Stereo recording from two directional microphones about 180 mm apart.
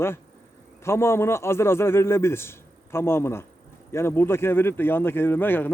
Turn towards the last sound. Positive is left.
turn(degrees=10)  # may be behind; listen again after turning